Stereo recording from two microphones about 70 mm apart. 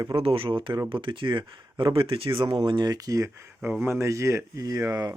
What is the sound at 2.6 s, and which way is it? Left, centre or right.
Speech, right.